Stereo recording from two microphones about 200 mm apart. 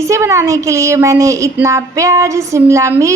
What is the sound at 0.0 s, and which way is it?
Speech, 15° right (ahead or behind).